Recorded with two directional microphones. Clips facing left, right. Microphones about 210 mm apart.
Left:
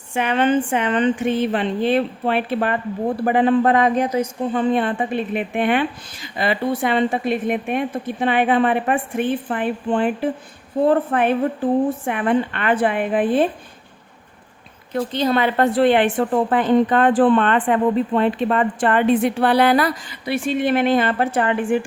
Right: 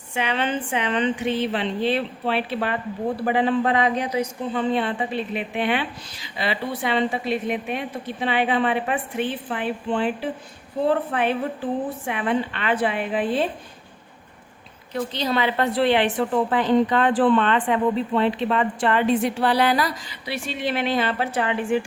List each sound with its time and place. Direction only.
0.1 s a woman's voice: 50° left (ahead or behind)
14.9 s a woman's voice: 50° left (ahead or behind)